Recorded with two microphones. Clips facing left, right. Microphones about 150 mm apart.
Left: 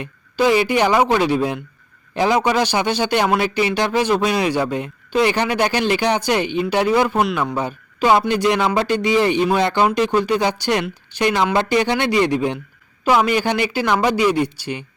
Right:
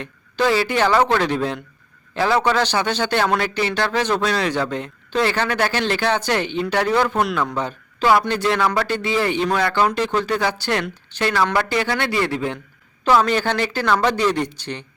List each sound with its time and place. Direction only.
0.0 s speech: 15° left (ahead or behind)